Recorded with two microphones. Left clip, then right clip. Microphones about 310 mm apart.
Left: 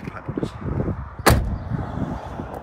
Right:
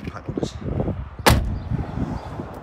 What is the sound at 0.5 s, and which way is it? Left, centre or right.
Arrow, centre.